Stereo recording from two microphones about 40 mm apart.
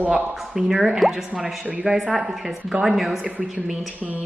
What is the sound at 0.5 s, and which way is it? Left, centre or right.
A woman's voice, centre.